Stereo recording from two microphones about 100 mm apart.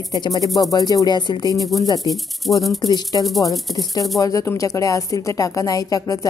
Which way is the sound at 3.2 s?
Centre (ahead or behind).